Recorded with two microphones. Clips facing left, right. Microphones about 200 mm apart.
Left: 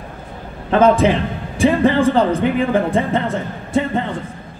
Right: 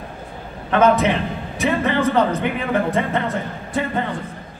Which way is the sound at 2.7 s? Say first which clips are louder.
Left 3 dB; 30° left (ahead or behind).